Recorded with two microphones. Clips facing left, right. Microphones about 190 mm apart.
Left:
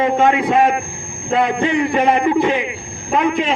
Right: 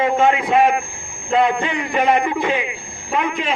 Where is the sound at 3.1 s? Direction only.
50° left (ahead or behind).